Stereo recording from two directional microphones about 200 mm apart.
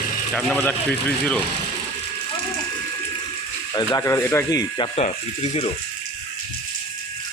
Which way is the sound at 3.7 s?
20° left (ahead or behind).